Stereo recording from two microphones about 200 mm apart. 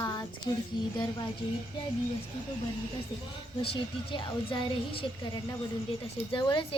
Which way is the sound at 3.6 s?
25° left (ahead or behind).